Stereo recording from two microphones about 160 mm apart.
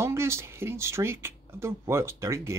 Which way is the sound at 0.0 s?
15° right (ahead or behind).